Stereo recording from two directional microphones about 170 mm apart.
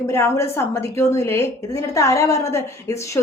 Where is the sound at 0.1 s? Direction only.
15° left (ahead or behind).